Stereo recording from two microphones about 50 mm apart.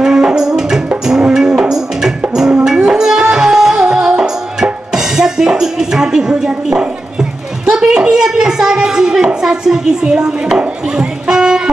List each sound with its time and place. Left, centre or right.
0.0 s music: centre